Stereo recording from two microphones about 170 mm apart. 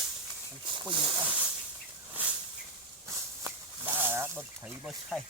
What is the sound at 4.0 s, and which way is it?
Speech, 15° right (ahead or behind).